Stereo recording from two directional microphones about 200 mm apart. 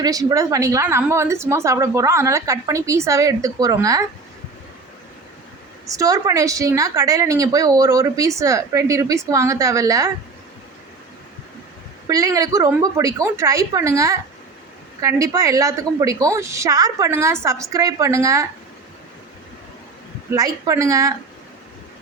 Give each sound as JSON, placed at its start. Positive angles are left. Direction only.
{"t": 0.0, "sound": "a woman's voice", "side_deg": -20}
{"t": 5.9, "sound": "a woman's voice", "side_deg": -15}
{"t": 12.0, "sound": "a woman's voice", "side_deg": -15}
{"t": 20.3, "sound": "a woman's voice", "side_deg": -15}